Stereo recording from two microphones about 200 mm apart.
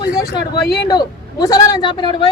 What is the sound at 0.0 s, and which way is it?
Speech, 55° left (ahead or behind).